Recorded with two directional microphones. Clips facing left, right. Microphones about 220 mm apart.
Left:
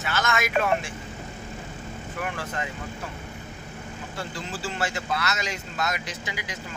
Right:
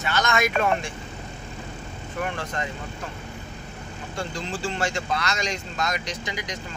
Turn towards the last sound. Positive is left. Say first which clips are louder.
# right 3 dB
turn(degrees=5)  # may be behind; listen again after turning